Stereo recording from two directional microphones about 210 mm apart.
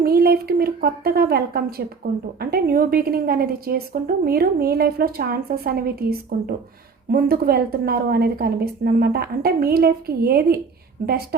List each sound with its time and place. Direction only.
0.0 s a woman's voice: 45° right (ahead or behind)